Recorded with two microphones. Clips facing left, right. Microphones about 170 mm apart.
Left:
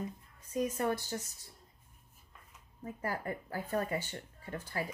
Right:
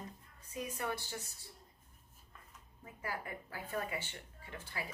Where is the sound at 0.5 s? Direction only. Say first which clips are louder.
Left 8 dB; 45° left (ahead or behind).